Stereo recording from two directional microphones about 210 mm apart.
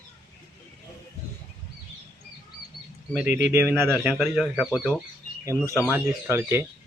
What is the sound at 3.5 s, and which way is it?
Speech, 10° right (ahead or behind).